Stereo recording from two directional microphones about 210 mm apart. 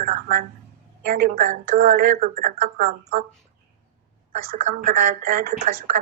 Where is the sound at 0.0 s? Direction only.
40° right (ahead or behind).